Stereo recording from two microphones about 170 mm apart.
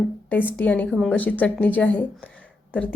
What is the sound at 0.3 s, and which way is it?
Speech, 10° left (ahead or behind).